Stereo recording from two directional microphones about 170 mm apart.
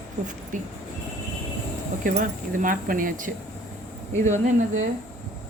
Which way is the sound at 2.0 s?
50° right (ahead or behind).